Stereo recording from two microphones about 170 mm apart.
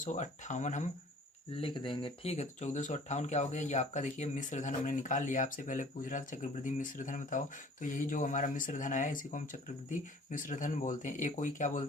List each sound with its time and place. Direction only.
0.0 s speech: 45° left (ahead or behind)
1.5 s speech: 30° left (ahead or behind); by 11.9 s 50° left (ahead or behind)